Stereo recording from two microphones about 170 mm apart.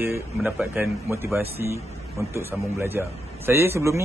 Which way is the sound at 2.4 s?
15° right (ahead or behind).